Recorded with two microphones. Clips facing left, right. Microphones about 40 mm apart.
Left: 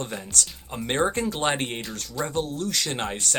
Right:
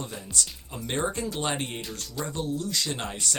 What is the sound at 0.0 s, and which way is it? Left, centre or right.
Speech, left.